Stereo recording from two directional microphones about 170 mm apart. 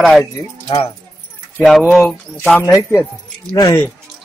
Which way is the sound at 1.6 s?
Centre (ahead or behind).